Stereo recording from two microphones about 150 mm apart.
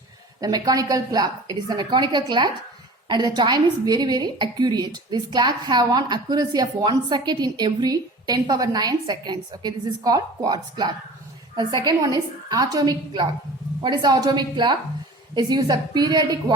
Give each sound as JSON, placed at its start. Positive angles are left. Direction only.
{"t": 0.4, "sound": "a woman's voice", "side_deg": -25}